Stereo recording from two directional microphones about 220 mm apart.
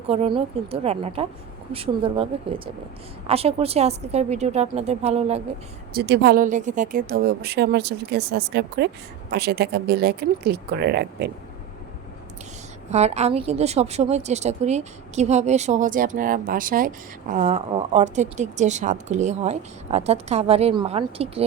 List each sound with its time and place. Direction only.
0.1 s a woman's voice: 25° right (ahead or behind)
5.9 s speech: 45° right (ahead or behind)
12.9 s speech: 30° right (ahead or behind)